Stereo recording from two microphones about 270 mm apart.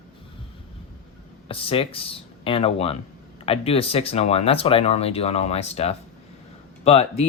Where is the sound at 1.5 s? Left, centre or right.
Left.